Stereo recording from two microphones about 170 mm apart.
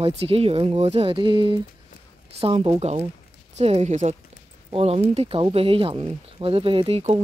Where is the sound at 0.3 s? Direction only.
35° right (ahead or behind).